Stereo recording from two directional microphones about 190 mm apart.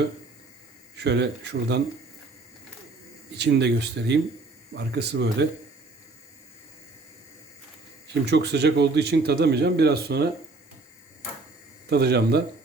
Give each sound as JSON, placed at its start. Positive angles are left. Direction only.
{"t": 0.9, "sound": "speech", "side_deg": -65}
{"t": 3.3, "sound": "speech", "side_deg": -65}
{"t": 8.3, "sound": "speech", "side_deg": -60}
{"t": 11.9, "sound": "speech", "side_deg": -60}